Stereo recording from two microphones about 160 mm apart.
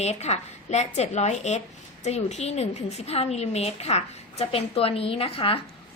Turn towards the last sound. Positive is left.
turn(degrees=35)  # may be behind; listen again after turning